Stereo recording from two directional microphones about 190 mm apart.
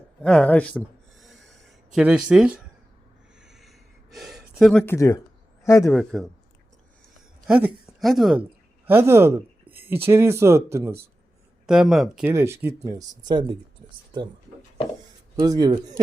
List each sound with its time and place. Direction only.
0.2 s a man's voice: 5° left (ahead or behind)
0.8 s a sound: centre (ahead or behind)
2.0 s speech: 5° right (ahead or behind)
3.4 s a sound: centre (ahead or behind); by 5.2 s 15° left (ahead or behind)
5.6 s a man's voice: 15° left (ahead or behind)
5.9 s speech: centre (ahead or behind)
7.4 s speech: 5° right (ahead or behind)
8.9 s speech: 10° right (ahead or behind)
12.3 s speech: 15° right (ahead or behind)
15.4 s speech: 20° right (ahead or behind)